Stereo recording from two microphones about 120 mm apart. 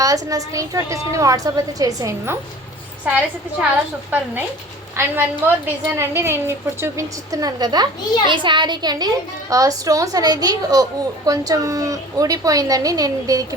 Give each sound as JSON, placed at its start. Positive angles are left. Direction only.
{"t": 0.0, "sound": "a woman's voice", "side_deg": -30}
{"t": 3.1, "sound": "a woman's voice", "side_deg": -10}